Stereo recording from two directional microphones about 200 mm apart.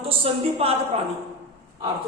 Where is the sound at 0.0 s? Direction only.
30° right (ahead or behind).